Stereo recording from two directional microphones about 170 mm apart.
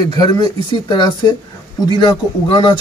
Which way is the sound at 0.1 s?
25° left (ahead or behind).